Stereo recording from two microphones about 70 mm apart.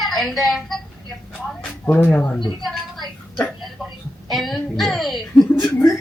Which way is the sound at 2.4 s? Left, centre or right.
Left.